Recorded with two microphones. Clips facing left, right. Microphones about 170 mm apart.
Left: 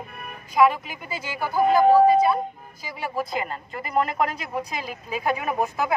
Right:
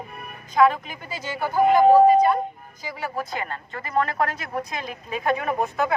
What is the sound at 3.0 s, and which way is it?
A woman's voice, 10° left (ahead or behind).